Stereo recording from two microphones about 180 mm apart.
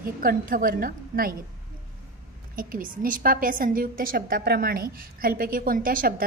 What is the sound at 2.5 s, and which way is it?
A woman's voice, 50° right (ahead or behind).